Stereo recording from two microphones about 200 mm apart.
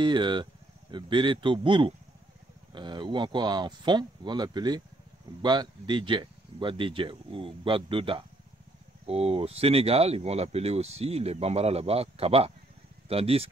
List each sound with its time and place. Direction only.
0.0 s speech: 25° right (ahead or behind)